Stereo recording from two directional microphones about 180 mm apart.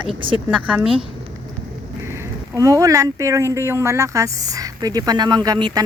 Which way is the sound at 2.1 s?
15° right (ahead or behind).